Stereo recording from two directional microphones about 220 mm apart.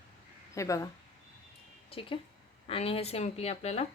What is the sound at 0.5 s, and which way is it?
Speech, 15° left (ahead or behind).